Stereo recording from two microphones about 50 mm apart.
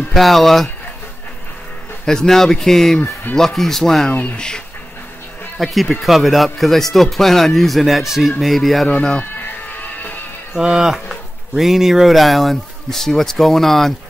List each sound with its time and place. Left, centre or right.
0.1 s a man's voice: centre
2.0 s speech: centre
5.6 s a man's voice: centre
9.7 s music: left
10.5 s speech: centre